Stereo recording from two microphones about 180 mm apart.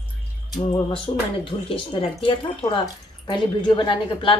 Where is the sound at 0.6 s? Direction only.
35° left (ahead or behind).